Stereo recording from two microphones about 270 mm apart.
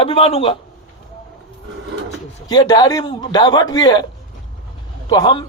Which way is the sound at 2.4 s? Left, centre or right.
Centre.